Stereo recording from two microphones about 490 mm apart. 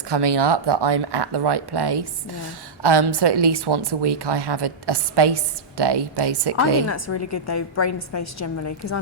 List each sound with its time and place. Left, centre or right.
0.1 s speech: right
6.8 s a woman's voice: left